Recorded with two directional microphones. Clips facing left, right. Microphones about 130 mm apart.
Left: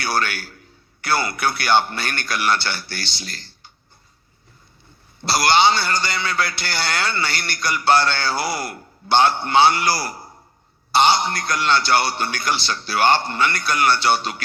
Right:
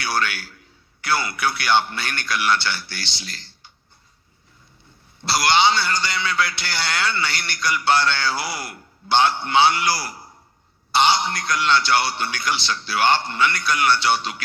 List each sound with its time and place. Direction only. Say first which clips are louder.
0.0 s a man's voice: left 1 dB; 45° left (ahead or behind)
5.2 s a man's voice: left 2 dB; 45° left (ahead or behind)